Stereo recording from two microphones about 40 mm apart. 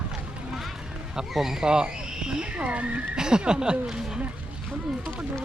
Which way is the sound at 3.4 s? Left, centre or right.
Right.